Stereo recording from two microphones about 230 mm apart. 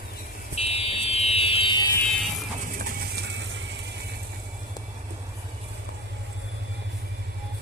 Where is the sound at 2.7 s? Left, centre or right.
Right.